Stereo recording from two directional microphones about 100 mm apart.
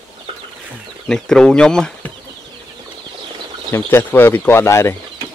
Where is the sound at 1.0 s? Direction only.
5° left (ahead or behind).